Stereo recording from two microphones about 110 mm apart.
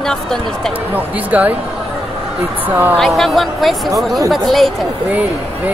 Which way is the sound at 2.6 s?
15° right (ahead or behind).